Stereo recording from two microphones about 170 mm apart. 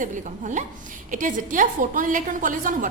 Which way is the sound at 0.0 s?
45° right (ahead or behind).